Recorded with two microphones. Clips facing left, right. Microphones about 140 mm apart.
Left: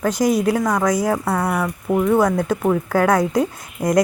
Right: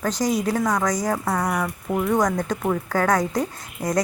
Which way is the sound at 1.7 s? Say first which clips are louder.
Left 5 dB; 20° left (ahead or behind).